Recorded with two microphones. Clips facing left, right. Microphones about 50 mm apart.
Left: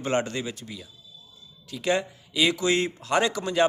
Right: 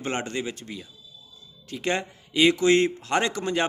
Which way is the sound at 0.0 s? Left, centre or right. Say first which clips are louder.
Left 2 dB; right.